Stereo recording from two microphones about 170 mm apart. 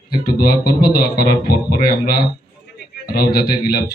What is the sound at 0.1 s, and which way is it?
Speech, 65° left (ahead or behind).